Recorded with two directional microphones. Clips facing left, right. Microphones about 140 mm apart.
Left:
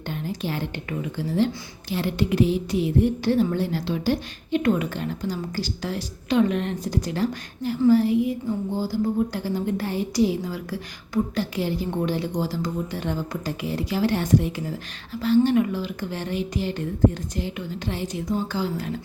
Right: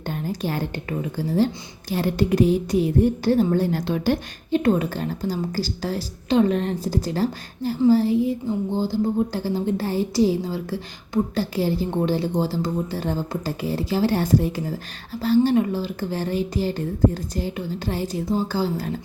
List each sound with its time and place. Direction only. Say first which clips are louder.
0.1 s a woman's voice: right 2 dB; 45° right (ahead or behind)
4.5 s a woman's voice: right 2 dB; 35° right (ahead or behind)